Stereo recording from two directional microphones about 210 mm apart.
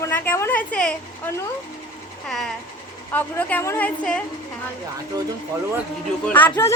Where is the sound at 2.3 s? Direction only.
Centre (ahead or behind).